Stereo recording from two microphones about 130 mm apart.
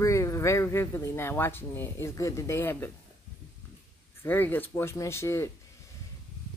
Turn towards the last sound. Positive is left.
turn(degrees=20)  # may be behind; listen again after turning